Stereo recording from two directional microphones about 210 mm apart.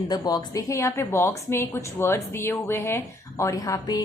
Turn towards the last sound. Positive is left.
turn(degrees=15)  # may be behind; listen again after turning